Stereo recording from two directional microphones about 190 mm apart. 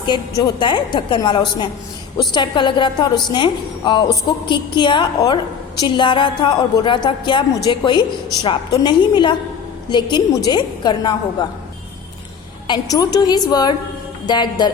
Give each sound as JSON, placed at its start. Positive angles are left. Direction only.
{"t": 0.0, "sound": "a woman's voice", "side_deg": 25}
{"t": 12.6, "sound": "a woman's voice", "side_deg": 20}